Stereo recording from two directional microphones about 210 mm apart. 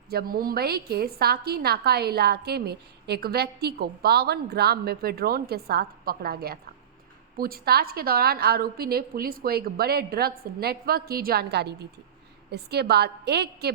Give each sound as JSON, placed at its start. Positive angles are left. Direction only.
{"t": 0.1, "sound": "a woman's voice", "side_deg": -45}